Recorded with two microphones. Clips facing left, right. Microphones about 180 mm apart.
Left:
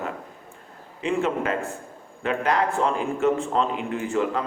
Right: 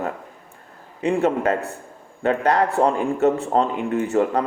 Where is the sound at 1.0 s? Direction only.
40° right (ahead or behind).